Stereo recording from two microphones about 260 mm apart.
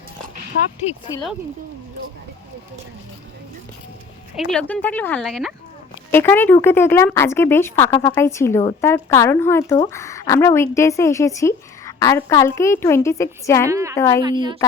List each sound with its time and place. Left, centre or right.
4.4 s speech: centre
13.7 s a woman's voice: centre
13.9 s speech: centre
14.3 s a woman's voice: centre